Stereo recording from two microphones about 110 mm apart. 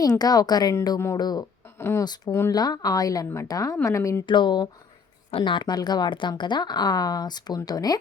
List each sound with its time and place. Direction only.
0.2 s a woman's voice: 35° left (ahead or behind)
1.8 s speech: 20° left (ahead or behind)
2.5 s a woman's voice: 35° left (ahead or behind)
4.3 s a woman's voice: 45° left (ahead or behind)